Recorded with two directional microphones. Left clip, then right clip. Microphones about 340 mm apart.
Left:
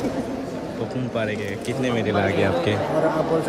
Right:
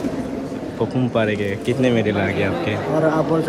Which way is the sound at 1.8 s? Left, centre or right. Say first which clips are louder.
Right 2 dB; centre.